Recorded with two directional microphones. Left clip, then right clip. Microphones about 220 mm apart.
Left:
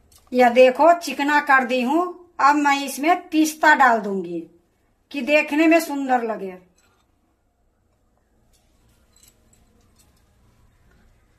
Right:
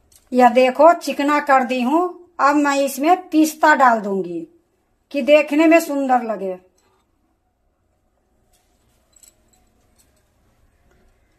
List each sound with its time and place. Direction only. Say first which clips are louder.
0.3 s a woman's voice: right 1 dB; 30° right (ahead or behind)